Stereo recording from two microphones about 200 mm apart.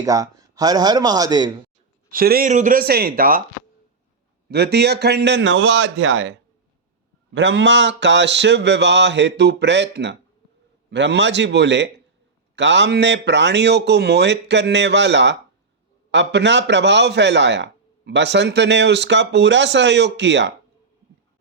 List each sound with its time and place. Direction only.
0.0 s speech: 15° right (ahead or behind)
2.0 s speech: 45° right (ahead or behind)
4.4 s a man's voice: 55° right (ahead or behind); by 6.3 s 70° right (ahead or behind)
7.3 s a man's voice: 65° right (ahead or behind)